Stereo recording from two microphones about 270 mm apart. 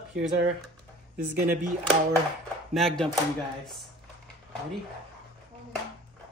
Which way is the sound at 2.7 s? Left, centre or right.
Centre.